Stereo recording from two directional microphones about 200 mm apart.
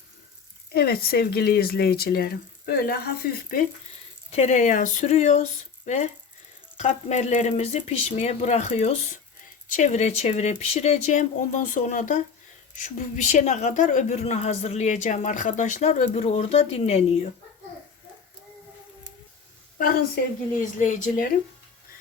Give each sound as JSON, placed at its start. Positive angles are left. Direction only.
{"t": 0.7, "sound": "speech", "side_deg": 50}
{"t": 4.3, "sound": "a woman's voice", "side_deg": 35}
{"t": 19.8, "sound": "a woman's voice", "side_deg": 45}